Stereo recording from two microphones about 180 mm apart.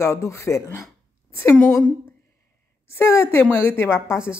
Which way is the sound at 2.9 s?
15° left (ahead or behind).